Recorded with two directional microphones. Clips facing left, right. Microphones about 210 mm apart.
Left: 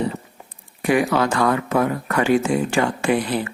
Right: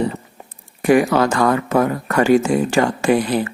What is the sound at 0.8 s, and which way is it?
Speech, 45° right (ahead or behind).